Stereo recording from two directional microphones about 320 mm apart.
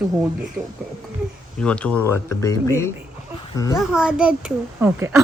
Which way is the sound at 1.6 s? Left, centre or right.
Centre.